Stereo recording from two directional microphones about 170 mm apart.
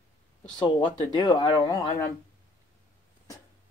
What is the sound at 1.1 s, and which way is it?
Speech, 25° left (ahead or behind).